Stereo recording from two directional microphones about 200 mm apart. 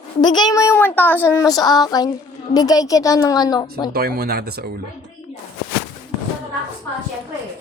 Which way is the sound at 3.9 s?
50° right (ahead or behind).